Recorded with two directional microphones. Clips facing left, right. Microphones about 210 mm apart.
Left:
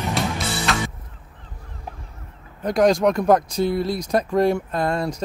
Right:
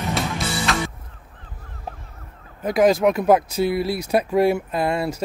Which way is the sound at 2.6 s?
5° right (ahead or behind).